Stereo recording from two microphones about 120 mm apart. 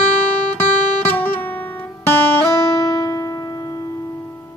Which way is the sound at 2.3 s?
30° left (ahead or behind).